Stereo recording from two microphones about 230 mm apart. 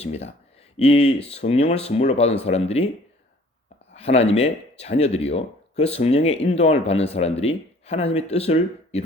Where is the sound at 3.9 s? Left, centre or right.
Left.